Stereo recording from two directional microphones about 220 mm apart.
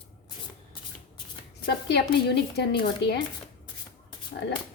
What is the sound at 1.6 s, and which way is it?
Speech, 50° left (ahead or behind).